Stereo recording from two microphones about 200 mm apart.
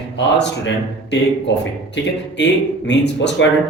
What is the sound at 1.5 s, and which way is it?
A man's voice, 65° left (ahead or behind).